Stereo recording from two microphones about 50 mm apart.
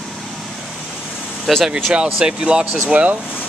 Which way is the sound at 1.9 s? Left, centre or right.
Right.